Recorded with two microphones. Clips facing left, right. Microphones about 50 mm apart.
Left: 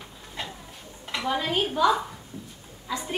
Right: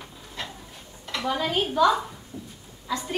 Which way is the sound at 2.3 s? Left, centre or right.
Centre.